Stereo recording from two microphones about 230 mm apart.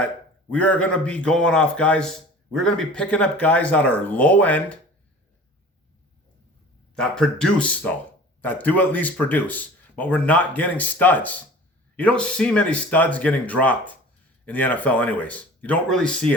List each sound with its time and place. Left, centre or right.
0.5 s a man's voice: centre
6.9 s a man's voice: centre